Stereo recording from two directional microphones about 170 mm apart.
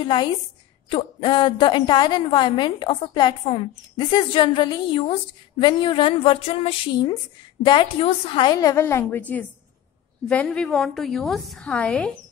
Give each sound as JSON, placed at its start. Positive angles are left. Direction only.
{"t": 0.0, "sound": "a woman's voice", "side_deg": 30}
{"t": 10.2, "sound": "a woman's voice", "side_deg": 5}